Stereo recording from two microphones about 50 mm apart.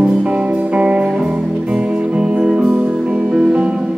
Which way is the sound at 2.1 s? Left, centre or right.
Centre.